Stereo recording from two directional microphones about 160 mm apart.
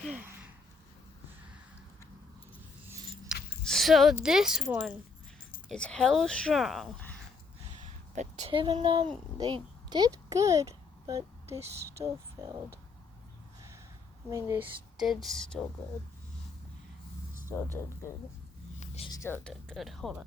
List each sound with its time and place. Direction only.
0.0 s gasp: 5° right (ahead or behind)
3.6 s speech: centre (ahead or behind)
5.7 s a woman's voice: 5° left (ahead or behind)
7.0 s a sound: 10° left (ahead or behind)
8.1 s a child's voice: 45° right (ahead or behind); by 12.5 s 25° right (ahead or behind)
14.3 s speech: 20° right (ahead or behind)
15.0 s a woman's voice: centre (ahead or behind)
17.5 s speech: 15° left (ahead or behind)
19.0 s music: 20° left (ahead or behind)
19.5 s a woman's voice: 5° left (ahead or behind)